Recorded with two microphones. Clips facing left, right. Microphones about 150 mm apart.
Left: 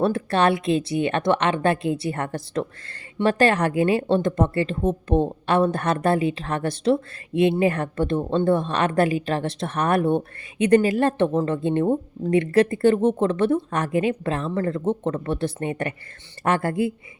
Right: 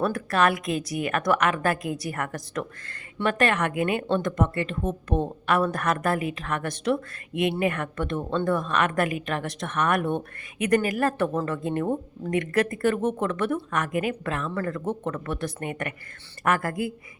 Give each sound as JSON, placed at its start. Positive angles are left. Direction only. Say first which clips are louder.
{"t": 0.0, "sound": "speech", "louder": "left 3 dB", "side_deg": 30}